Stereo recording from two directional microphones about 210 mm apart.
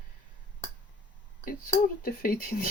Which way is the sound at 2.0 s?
40° left (ahead or behind).